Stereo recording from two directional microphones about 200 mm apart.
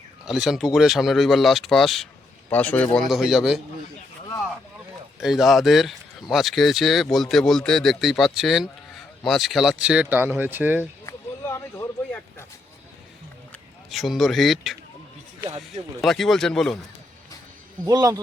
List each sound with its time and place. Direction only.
0.3 s speech: centre (ahead or behind)
5.2 s speech: centre (ahead or behind)
11.0 s a sound: 15° left (ahead or behind)
13.5 s a man's voice: centre (ahead or behind)
16.0 s speech: centre (ahead or behind)
17.8 s speech: 20° right (ahead or behind)